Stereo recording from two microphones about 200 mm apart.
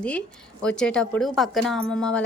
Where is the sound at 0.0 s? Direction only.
5° left (ahead or behind).